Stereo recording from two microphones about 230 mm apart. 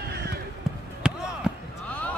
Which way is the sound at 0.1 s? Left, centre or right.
Right.